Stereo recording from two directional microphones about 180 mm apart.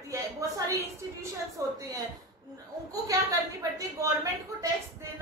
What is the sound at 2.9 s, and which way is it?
A woman's voice, 20° right (ahead or behind).